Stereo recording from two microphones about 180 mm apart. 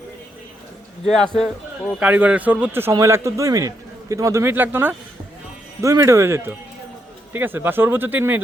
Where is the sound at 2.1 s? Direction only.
10° right (ahead or behind).